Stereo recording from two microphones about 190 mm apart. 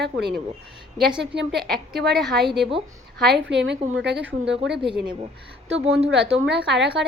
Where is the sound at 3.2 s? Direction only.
65° right (ahead or behind).